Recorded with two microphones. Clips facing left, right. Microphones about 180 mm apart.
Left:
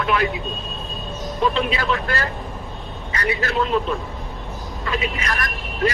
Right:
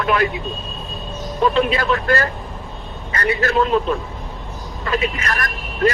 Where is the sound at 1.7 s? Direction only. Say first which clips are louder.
Right 5 dB; 50° right (ahead or behind).